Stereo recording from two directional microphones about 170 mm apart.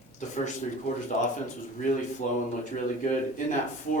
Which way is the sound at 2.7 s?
50° left (ahead or behind).